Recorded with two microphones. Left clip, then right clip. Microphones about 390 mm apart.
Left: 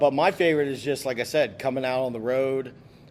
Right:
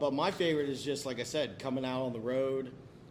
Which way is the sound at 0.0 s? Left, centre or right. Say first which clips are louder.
Left 10 dB; left.